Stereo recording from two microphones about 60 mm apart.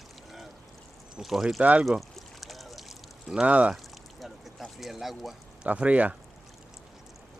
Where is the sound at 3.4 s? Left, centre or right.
Right.